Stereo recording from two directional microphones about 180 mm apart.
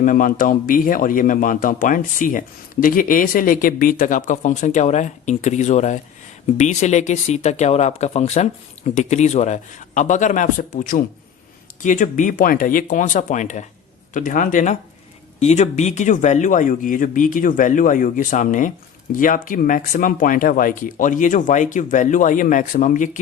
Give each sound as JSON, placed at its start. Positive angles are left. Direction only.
{"t": 0.0, "sound": "speech", "side_deg": 50}